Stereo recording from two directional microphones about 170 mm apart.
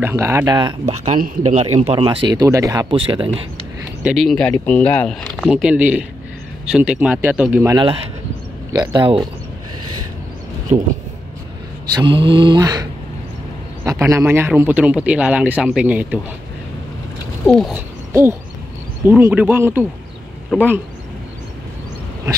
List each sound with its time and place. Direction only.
0.0 s speech: 15° right (ahead or behind)
1.4 s speech: 40° right (ahead or behind); by 2.9 s 20° right (ahead or behind)
2.9 s speech: 30° right (ahead or behind)
4.0 s speech: centre (ahead or behind)
7.6 s speech: 30° right (ahead or behind)
8.7 s mantra: 25° right (ahead or behind)
10.7 s speech: 45° right (ahead or behind)
11.9 s mantra: 30° right (ahead or behind)
13.8 s speech: 15° right (ahead or behind)
17.5 s speech: 5° left (ahead or behind)
17.7 s owl: 15° right (ahead or behind)
19.0 s speech: 10° right (ahead or behind)